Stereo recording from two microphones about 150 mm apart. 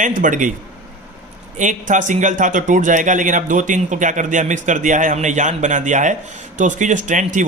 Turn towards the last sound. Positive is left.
turn(degrees=-55)  # may be behind; listen again after turning